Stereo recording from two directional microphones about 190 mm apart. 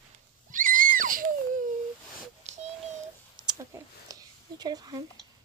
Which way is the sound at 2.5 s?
35° right (ahead or behind).